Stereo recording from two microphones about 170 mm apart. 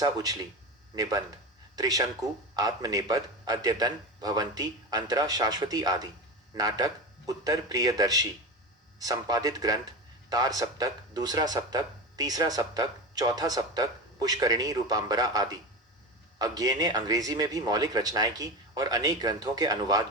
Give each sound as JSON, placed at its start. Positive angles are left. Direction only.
{"t": 0.0, "sound": "speech", "side_deg": -20}
{"t": 1.7, "sound": "speech", "side_deg": -20}